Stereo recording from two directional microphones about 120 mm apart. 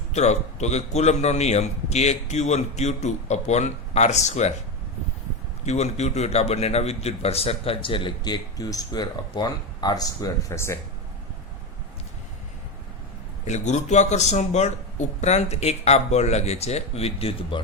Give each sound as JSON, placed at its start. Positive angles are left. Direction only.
{"t": 0.1, "sound": "a man's voice", "side_deg": 70}
{"t": 5.6, "sound": "a man's voice", "side_deg": 65}
{"t": 13.4, "sound": "a man's voice", "side_deg": 75}